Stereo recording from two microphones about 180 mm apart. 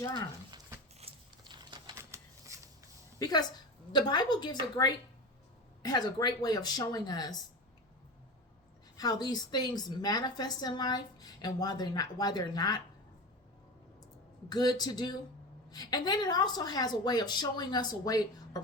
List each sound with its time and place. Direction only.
0.9 s scissors: 30° right (ahead or behind)
3.2 s a woman's voice: 20° left (ahead or behind)
9.0 s a woman's voice: 25° left (ahead or behind)
14.5 s a woman's voice: 25° left (ahead or behind)